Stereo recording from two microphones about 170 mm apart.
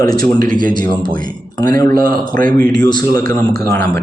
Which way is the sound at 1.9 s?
55° right (ahead or behind).